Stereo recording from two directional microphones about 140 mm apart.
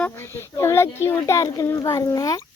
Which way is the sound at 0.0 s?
15° left (ahead or behind).